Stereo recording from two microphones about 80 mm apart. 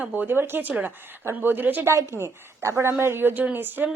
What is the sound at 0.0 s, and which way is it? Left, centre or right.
Speech, centre.